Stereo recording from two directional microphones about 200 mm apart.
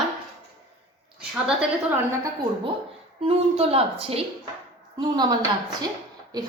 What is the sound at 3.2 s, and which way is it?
A woman's voice, 30° right (ahead or behind).